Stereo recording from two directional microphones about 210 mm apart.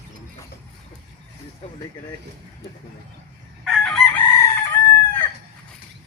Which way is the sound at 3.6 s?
5° left (ahead or behind).